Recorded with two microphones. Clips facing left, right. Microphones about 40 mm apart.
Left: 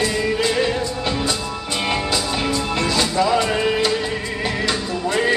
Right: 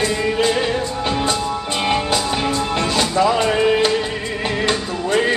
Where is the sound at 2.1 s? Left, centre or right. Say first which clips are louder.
Right 2 dB; right.